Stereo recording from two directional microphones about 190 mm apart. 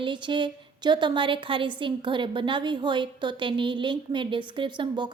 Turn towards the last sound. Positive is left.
turn(degrees=-25)  # may be behind; listen again after turning